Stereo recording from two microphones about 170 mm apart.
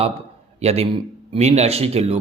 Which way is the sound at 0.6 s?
35° right (ahead or behind).